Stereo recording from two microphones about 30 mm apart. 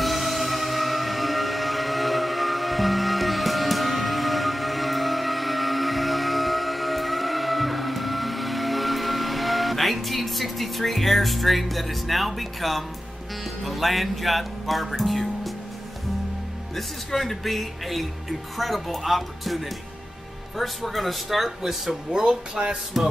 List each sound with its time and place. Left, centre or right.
0.0 s music: centre
13.7 s speech: centre
16.7 s speech: centre
22.1 s speech: right
23.0 s speech: centre